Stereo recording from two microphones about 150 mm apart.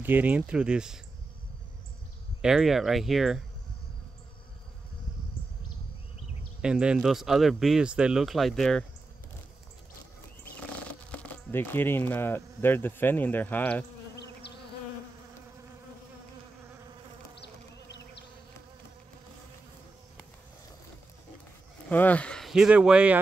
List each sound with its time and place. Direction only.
0.0 s speech: 10° right (ahead or behind)
2.4 s speech: centre (ahead or behind)
6.6 s speech: 5° right (ahead or behind)
11.1 s speech: 15° left (ahead or behind)
14.4 s bee: 90° left
21.8 s speech: 10° left (ahead or behind); by 23.1 s 10° right (ahead or behind)